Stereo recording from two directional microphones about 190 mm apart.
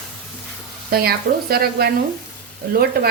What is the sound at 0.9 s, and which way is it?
A woman's voice, 55° right (ahead or behind).